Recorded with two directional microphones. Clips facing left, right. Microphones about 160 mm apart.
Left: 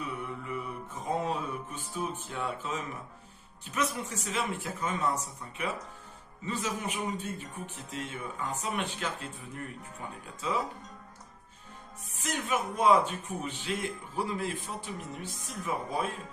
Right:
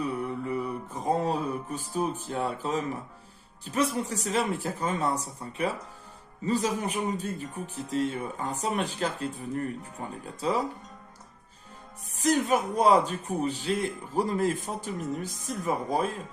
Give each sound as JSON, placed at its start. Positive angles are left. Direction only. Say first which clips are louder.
{"t": 0.2, "sound": "music", "louder": "right 7 dB", "side_deg": -40}
{"t": 3.7, "sound": "speech", "louder": "right 5 dB", "side_deg": -30}
{"t": 12.1, "sound": "speech", "louder": "right 8 dB", "side_deg": -35}